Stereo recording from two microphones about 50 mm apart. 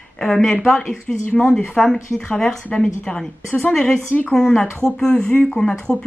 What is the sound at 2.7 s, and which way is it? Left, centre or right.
Speech, centre.